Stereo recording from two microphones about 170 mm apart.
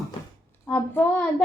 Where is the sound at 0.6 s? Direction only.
10° left (ahead or behind).